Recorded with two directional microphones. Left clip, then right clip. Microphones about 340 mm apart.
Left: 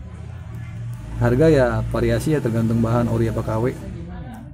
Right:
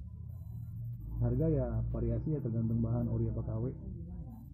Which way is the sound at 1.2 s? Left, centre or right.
Left.